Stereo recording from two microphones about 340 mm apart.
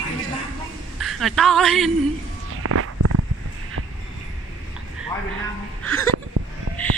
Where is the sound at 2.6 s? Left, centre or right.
Right.